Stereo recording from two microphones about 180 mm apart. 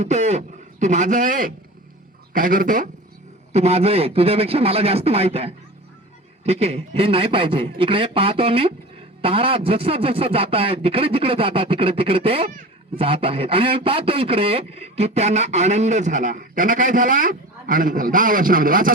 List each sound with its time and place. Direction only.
0.0 s a man's voice: 40° right (ahead or behind)
3.5 s speech: 35° right (ahead or behind); by 18.9 s 50° right (ahead or behind)